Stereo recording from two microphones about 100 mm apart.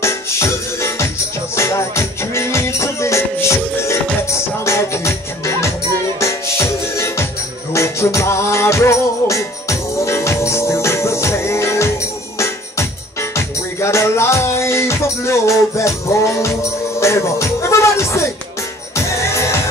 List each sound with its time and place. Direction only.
0.0 s music: 30° left (ahead or behind)